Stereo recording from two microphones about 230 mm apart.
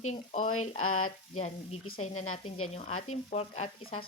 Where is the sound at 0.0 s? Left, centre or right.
Left.